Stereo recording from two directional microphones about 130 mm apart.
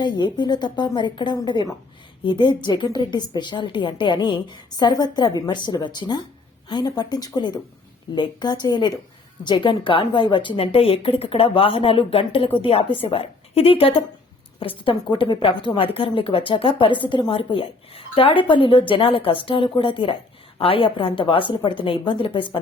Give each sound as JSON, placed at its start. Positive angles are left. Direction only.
{"t": 0.0, "sound": "a woman's voice", "side_deg": 35}